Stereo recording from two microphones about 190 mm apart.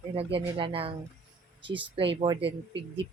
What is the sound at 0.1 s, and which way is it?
Speech, 30° right (ahead or behind).